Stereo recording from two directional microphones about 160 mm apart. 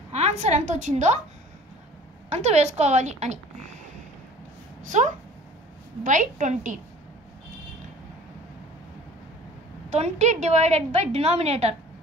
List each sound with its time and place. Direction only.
0.1 s a woman's voice: 45° right (ahead or behind)
2.2 s a woman's voice: 45° right (ahead or behind)
4.8 s a woman's voice: 50° right (ahead or behind)
9.8 s a woman's voice: 45° right (ahead or behind)